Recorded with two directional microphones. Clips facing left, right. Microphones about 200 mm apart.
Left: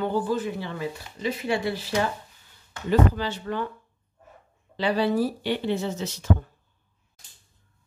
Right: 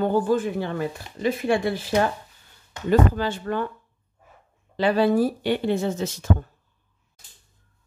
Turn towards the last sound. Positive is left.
turn(degrees=-50)  # may be behind; listen again after turning